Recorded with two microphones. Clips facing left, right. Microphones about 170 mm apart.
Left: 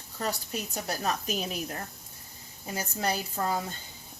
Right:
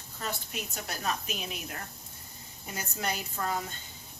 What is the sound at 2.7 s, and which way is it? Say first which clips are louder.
Speech: left 4 dB; 30° left (ahead or behind).